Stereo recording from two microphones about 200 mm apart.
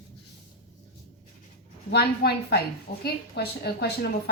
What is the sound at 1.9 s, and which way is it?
A woman's voice, 55° left (ahead or behind).